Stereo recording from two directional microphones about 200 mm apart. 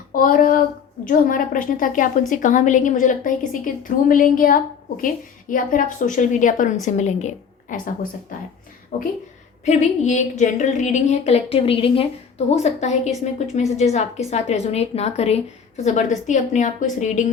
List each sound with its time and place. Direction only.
0.1 s a woman's voice: 45° left (ahead or behind)